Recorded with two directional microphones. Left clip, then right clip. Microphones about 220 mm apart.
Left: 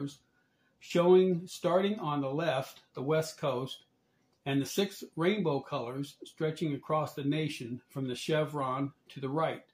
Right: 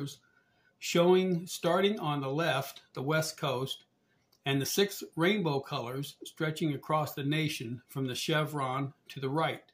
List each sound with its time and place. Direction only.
0.7 s speech: 50° right (ahead or behind)